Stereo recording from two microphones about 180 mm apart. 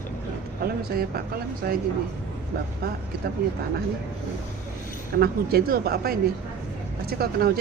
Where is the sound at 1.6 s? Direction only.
60° right (ahead or behind).